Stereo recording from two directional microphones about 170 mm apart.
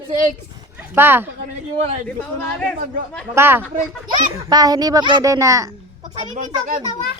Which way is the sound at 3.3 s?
15° right (ahead or behind).